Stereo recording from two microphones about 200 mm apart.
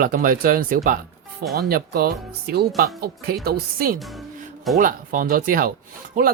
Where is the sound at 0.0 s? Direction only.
45° right (ahead or behind).